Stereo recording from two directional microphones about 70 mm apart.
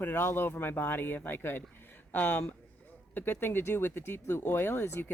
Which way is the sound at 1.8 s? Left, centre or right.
Left.